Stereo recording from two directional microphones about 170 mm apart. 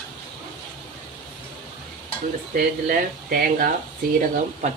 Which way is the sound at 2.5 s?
60° right (ahead or behind).